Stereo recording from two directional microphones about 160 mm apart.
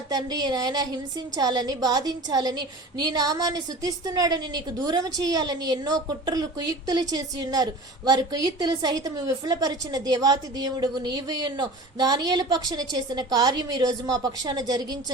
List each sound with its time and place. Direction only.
0.1 s a woman's voice: 25° right (ahead or behind)